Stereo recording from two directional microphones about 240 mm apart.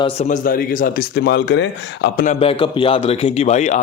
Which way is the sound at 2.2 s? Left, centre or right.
Left.